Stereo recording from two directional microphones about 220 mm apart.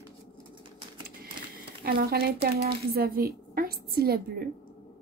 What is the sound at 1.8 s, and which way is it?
A woman's voice, 45° right (ahead or behind).